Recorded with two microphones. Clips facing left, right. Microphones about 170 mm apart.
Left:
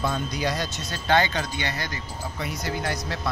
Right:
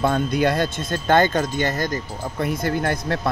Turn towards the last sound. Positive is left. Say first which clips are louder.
# right 6 dB
turn(degrees=-55)  # may be behind; listen again after turning